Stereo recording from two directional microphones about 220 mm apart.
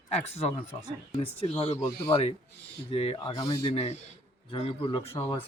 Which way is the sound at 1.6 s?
25° left (ahead or behind).